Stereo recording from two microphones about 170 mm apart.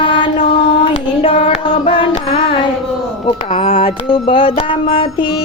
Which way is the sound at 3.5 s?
35° left (ahead or behind).